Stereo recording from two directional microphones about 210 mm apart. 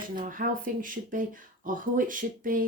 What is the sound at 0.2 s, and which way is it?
Speech, 40° right (ahead or behind).